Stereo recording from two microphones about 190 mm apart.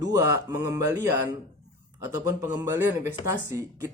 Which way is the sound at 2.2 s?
20° right (ahead or behind).